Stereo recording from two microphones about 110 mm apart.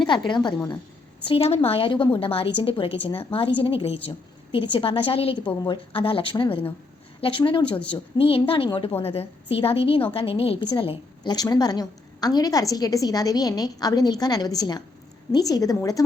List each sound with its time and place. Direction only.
0.1 s a woman's voice: 45° left (ahead or behind)
1.3 s a woman's voice: 65° left (ahead or behind); by 16.0 s 30° left (ahead or behind)